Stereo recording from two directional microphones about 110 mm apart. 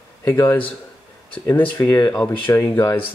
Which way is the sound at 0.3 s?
20° left (ahead or behind).